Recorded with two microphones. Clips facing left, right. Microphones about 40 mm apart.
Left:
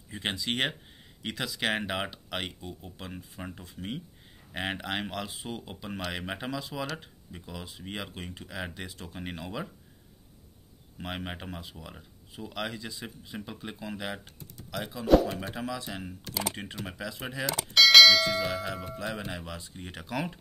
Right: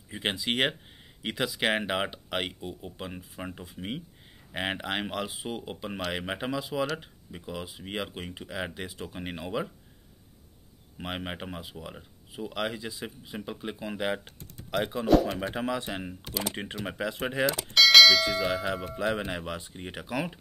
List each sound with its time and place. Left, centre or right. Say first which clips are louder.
0.1 s speech: right 2 dB; centre
11.0 s speech: right 2 dB; centre
14.7 s speech: right 7 dB; right
15.0 s speech: left 1 dB; centre
15.3 s speech: right 4 dB; centre
15.6 s speech: right 4 dB; right
17.1 s speech: right 9 dB; right
17.5 s speech: left 1 dB; centre
18.6 s speech: right 4 dB; centre
18.9 s speech: right 6 dB; right; by 20.3 s centre